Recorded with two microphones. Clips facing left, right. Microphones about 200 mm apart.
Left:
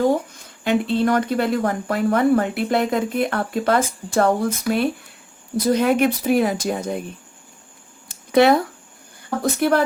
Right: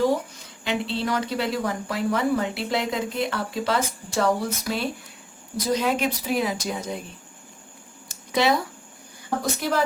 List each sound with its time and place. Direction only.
0.6 s speech: 50° left (ahead or behind)
8.0 s a sound: 60° left (ahead or behind)
9.4 s speech: 60° left (ahead or behind)